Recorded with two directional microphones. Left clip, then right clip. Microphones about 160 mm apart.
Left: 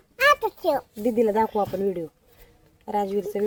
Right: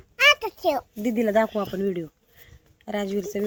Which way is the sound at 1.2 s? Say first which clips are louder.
Even; 45° right (ahead or behind).